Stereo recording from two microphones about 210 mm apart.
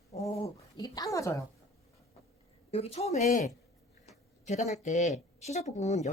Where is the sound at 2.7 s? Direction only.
30° left (ahead or behind).